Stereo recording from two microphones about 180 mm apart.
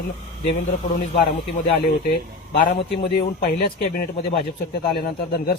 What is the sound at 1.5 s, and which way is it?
Speech, 65° left (ahead or behind).